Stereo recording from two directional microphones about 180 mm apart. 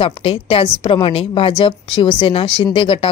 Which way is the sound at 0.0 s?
30° left (ahead or behind).